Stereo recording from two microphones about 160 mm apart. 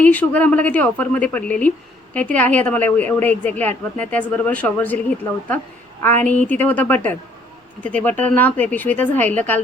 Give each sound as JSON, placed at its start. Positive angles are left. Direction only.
{"t": 0.0, "sound": "a woman's voice", "side_deg": 10}